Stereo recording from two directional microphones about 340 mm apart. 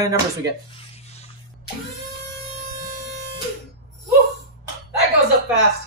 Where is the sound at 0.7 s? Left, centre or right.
Centre.